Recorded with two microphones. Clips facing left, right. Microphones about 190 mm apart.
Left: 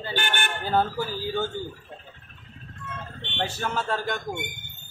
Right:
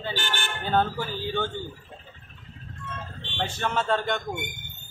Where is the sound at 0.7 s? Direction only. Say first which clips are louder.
Even; 5° left (ahead or behind).